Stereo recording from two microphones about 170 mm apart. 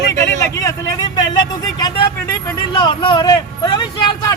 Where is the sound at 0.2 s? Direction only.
20° left (ahead or behind).